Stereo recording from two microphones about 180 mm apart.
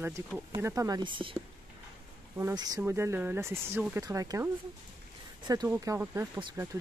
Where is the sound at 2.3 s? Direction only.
20° right (ahead or behind).